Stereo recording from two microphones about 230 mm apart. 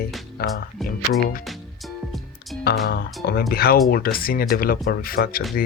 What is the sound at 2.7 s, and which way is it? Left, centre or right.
Speech, left.